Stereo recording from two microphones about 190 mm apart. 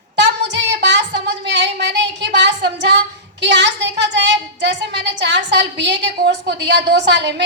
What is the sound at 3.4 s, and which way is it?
A woman's voice, 70° right (ahead or behind).